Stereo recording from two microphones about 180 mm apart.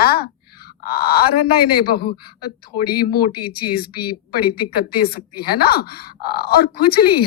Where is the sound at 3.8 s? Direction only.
60° left (ahead or behind).